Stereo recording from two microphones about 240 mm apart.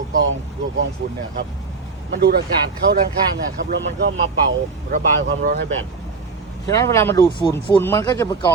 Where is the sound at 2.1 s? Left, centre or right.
Right.